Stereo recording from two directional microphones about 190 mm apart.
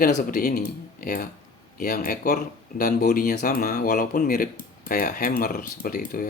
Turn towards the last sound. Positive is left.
turn(degrees=50)  # may be behind; listen again after turning